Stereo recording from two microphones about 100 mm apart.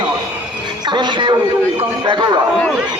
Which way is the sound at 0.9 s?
50° right (ahead or behind).